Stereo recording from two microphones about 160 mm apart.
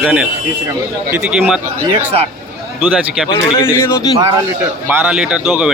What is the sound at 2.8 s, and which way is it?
Speech, centre (ahead or behind).